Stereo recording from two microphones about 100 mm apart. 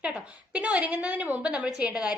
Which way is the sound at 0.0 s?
10° right (ahead or behind).